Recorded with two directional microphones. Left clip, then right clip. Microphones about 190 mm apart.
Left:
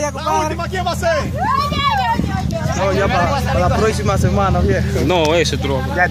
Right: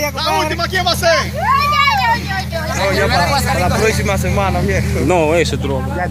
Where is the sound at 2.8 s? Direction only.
45° left (ahead or behind).